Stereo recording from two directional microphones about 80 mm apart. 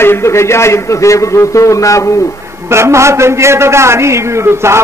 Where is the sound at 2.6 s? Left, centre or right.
Right.